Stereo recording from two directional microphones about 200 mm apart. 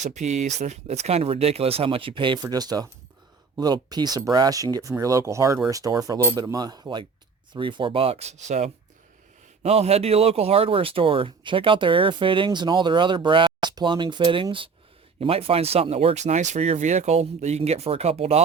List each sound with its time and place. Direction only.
0.0 s speech: 35° right (ahead or behind)